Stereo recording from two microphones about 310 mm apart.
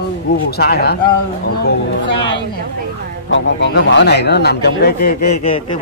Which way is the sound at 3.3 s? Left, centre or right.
Left.